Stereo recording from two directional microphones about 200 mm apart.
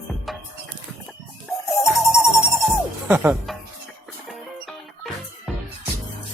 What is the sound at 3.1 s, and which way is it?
Speech, 10° right (ahead or behind).